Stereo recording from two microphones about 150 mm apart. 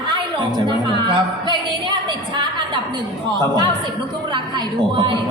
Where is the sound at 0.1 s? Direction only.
30° right (ahead or behind).